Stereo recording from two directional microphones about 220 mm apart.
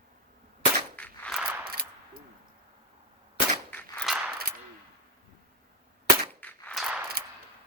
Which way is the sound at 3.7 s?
5° left (ahead or behind).